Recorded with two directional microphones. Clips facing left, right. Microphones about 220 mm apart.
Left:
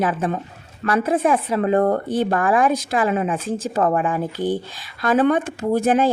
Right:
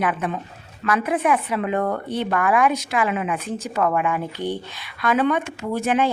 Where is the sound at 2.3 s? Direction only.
30° left (ahead or behind).